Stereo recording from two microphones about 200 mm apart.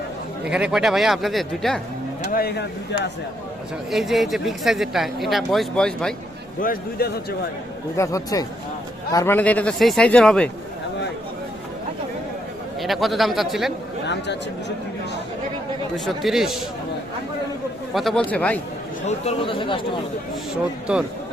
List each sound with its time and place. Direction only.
0.4 s speech: 5° right (ahead or behind)
2.3 s speech: 50° left (ahead or behind)
3.9 s speech: centre (ahead or behind)
6.6 s speech: 50° left (ahead or behind)
7.9 s speech: 15° left (ahead or behind)
12.8 s speech: centre (ahead or behind)
16.0 s speech: centre (ahead or behind)
17.9 s speech: centre (ahead or behind)
19.0 s speech: 30° left (ahead or behind)